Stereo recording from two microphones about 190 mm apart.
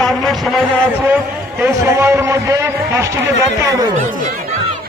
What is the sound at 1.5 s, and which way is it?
A man's voice, 10° right (ahead or behind).